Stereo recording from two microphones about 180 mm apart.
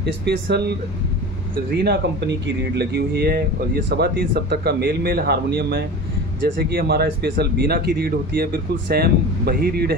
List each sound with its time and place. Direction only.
0.0 s speech: 70° right (ahead or behind)
1.8 s speech: 70° right (ahead or behind)